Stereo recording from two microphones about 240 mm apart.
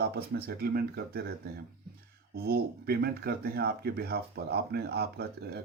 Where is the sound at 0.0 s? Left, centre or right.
Right.